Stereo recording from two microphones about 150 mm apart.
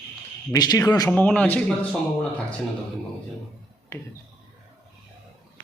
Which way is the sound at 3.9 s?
20° left (ahead or behind).